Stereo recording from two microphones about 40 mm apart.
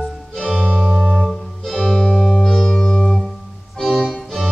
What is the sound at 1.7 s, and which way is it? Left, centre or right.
Music, centre.